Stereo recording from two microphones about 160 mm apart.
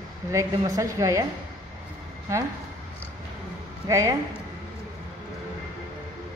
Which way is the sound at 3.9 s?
20° right (ahead or behind).